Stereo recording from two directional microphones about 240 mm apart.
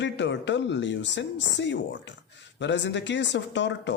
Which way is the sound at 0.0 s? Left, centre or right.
Left.